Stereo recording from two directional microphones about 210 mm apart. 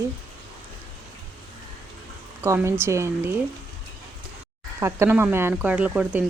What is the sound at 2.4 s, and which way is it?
Speech, 10° right (ahead or behind).